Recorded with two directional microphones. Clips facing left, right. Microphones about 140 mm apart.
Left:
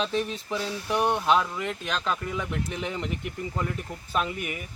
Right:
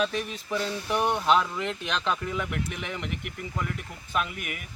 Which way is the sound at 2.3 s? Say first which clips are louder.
Even; 15° left (ahead or behind).